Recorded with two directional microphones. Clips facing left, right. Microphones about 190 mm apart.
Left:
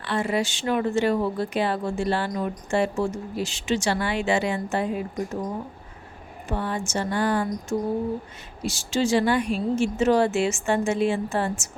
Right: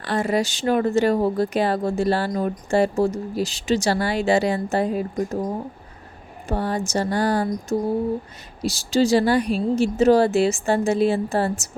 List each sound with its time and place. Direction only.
0.0 s speech: 40° right (ahead or behind)
6.5 s speech: 40° right (ahead or behind)